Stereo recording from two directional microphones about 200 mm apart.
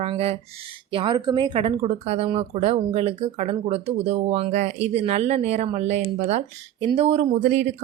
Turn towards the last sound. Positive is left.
turn(degrees=-40)  # may be behind; listen again after turning